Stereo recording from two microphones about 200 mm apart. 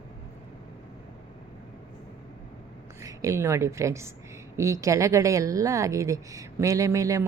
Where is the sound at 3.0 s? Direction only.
15° right (ahead or behind).